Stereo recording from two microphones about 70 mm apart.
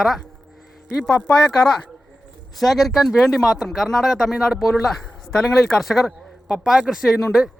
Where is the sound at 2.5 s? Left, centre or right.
Centre.